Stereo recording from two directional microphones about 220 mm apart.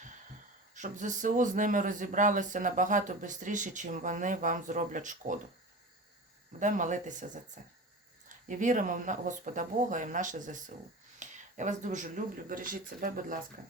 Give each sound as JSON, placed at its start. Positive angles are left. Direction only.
{"t": 0.7, "sound": "a man's voice", "side_deg": -35}
{"t": 6.6, "sound": "a man's voice", "side_deg": -35}